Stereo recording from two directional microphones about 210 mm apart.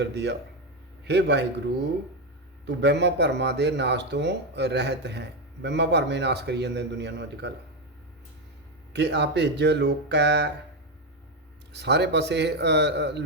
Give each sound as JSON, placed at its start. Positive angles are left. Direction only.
{"t": 0.0, "sound": "speech", "side_deg": -55}
{"t": 8.9, "sound": "speech", "side_deg": -55}
{"t": 11.7, "sound": "speech", "side_deg": -55}